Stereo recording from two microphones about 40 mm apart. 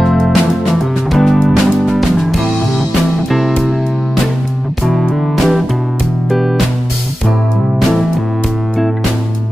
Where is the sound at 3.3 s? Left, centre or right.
Centre.